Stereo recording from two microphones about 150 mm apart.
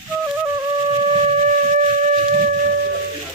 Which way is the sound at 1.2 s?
50° right (ahead or behind).